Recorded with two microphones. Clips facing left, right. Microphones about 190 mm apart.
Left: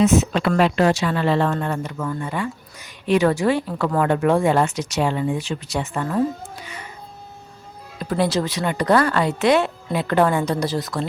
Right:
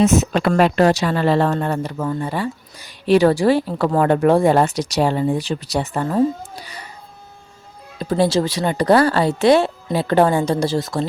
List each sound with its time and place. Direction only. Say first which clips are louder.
0.0 s speech: right 1 dB; 45° right (ahead or behind)
7.9 s speech: right 4 dB; 30° right (ahead or behind)